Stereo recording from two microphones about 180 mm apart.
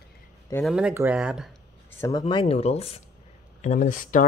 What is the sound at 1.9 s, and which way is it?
Speech, 15° left (ahead or behind).